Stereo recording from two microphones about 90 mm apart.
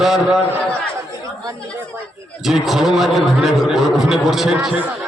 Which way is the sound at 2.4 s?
5° right (ahead or behind).